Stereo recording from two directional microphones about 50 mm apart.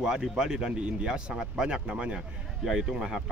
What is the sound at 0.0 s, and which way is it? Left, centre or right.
Speech, centre.